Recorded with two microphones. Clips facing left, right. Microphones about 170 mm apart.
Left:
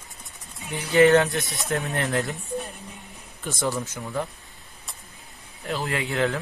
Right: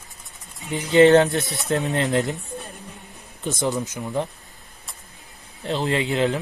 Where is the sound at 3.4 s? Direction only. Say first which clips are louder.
Right 3 dB; 20° right (ahead or behind).